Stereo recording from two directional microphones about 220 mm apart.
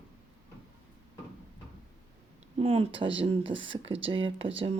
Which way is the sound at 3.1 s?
25° right (ahead or behind).